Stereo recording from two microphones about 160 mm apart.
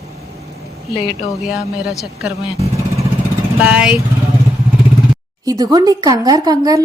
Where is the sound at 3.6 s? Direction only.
10° right (ahead or behind).